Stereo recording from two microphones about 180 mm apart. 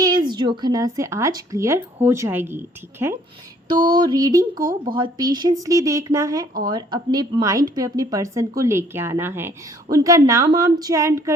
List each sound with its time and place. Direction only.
0.0 s speech: 25° right (ahead or behind)